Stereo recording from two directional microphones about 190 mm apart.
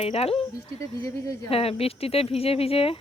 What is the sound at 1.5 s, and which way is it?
Speech, 30° left (ahead or behind).